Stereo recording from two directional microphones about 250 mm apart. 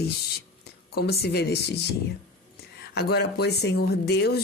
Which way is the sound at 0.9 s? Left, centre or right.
Left.